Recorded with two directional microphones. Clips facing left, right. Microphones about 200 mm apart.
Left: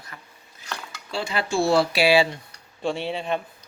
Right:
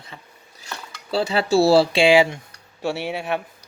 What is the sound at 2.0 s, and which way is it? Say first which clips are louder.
Speech: right 4 dB; 15° right (ahead or behind).